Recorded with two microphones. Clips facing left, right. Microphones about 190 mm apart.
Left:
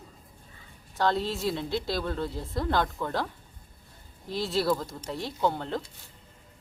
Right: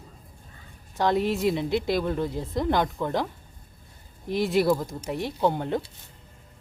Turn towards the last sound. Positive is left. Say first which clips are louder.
# right 4 dB
turn(degrees=-15)  # may be behind; listen again after turning